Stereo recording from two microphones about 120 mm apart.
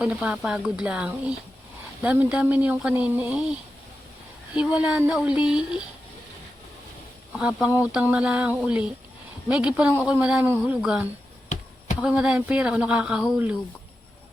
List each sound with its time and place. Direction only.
0.0 s speech: 10° right (ahead or behind)
4.5 s speech: 10° right (ahead or behind)
7.3 s speech: 10° right (ahead or behind)